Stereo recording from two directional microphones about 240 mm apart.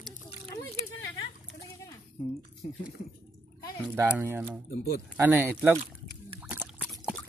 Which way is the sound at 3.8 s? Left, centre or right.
Centre.